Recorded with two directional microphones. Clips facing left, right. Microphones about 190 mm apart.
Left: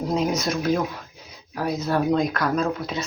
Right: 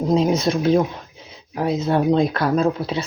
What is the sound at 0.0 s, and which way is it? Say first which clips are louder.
Speech: right 5 dB; 25° right (ahead or behind).